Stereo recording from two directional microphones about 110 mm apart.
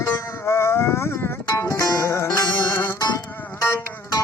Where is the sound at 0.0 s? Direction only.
20° left (ahead or behind).